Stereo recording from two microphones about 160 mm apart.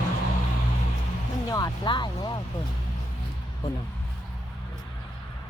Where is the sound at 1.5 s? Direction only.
25° left (ahead or behind).